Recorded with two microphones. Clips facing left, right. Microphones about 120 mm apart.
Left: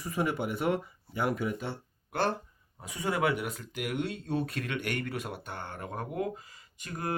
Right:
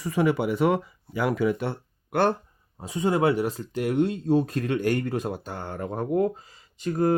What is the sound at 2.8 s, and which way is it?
Speech, 25° right (ahead or behind).